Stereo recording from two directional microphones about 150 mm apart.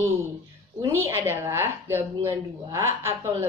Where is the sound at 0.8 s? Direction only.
15° right (ahead or behind).